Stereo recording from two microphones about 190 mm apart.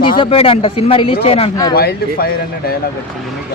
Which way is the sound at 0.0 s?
30° left (ahead or behind).